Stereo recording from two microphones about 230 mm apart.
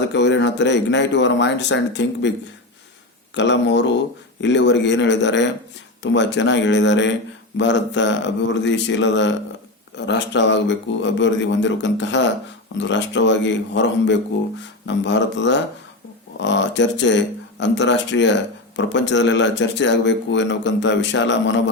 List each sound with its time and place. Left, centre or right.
0.1 s a man's voice: left
3.3 s a man's voice: left